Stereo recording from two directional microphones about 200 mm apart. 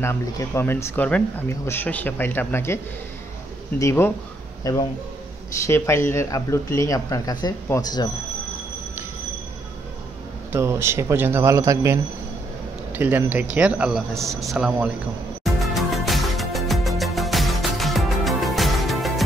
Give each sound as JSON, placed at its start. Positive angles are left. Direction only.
{"t": 0.0, "sound": "speech", "side_deg": 10}
{"t": 3.8, "sound": "a man's voice", "side_deg": 10}
{"t": 10.5, "sound": "speech", "side_deg": -15}
{"t": 14.1, "sound": "speech", "side_deg": -15}
{"t": 14.4, "sound": "speech", "side_deg": 0}
{"t": 15.4, "sound": "music", "side_deg": 0}